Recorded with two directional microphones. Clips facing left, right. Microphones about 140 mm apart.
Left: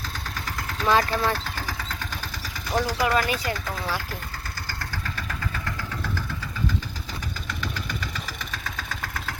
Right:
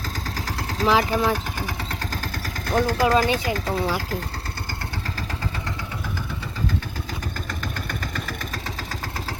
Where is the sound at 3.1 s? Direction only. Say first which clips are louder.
Right 4 dB; 35° right (ahead or behind).